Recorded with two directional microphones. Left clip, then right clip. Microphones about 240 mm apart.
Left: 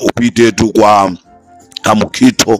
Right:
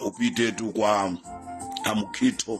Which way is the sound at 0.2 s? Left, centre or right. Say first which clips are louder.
Left 14 dB; left.